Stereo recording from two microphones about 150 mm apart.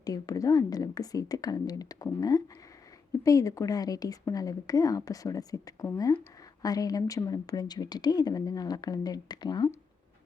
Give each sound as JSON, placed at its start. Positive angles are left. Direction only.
{"t": 0.0, "sound": "a woman's voice", "side_deg": 25}